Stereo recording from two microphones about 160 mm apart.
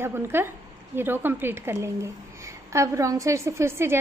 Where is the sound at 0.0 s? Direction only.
15° right (ahead or behind).